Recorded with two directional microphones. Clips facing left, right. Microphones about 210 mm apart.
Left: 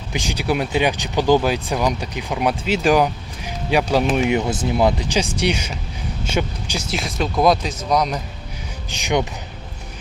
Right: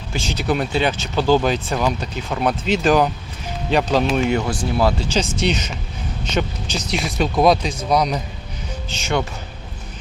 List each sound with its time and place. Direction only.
0.1 s speech: 15° left (ahead or behind)
7.0 s speech: centre (ahead or behind)
8.9 s speech: 15° left (ahead or behind)